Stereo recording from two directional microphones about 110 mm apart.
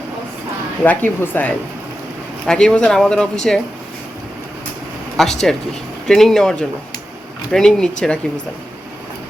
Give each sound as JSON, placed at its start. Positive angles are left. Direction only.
{"t": 0.9, "sound": "speech", "side_deg": 20}
{"t": 2.5, "sound": "speech", "side_deg": 5}
{"t": 5.1, "sound": "speech", "side_deg": 5}